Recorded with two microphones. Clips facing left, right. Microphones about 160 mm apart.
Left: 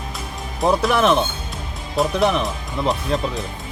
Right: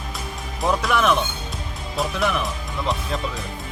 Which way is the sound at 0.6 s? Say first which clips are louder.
Left 3 dB; 35° left (ahead or behind).